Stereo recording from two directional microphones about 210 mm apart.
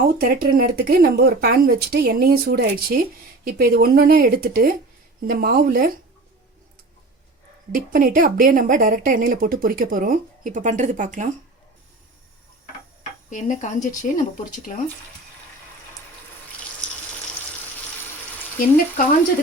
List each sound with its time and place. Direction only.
0.2 s speech: 45° right (ahead or behind)
7.7 s a woman's voice: 40° right (ahead or behind)
13.0 s a sound: 35° left (ahead or behind)
13.8 s speech: 40° left (ahead or behind)